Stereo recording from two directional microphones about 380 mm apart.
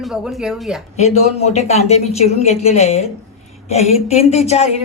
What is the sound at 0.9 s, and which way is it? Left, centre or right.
Speech, centre.